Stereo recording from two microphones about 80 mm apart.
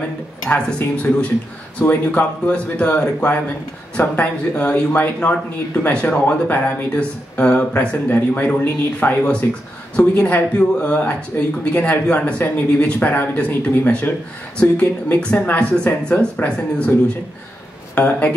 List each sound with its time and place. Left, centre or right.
0.5 s speech: centre
17.9 s speech: centre